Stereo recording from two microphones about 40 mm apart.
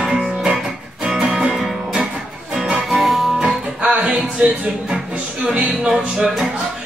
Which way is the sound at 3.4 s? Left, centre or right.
Right.